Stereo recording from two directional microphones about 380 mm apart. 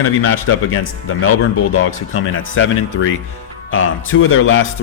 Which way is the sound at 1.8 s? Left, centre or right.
Left.